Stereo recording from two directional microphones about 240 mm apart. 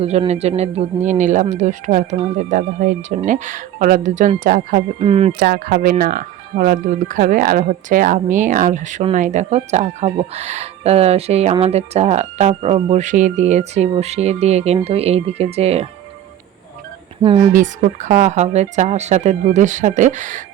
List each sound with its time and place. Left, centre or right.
0.0 s speech: right
5.4 s speech: right
17.5 s speech: right